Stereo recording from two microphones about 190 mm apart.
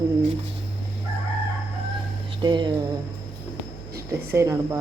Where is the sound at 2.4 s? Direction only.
25° right (ahead or behind).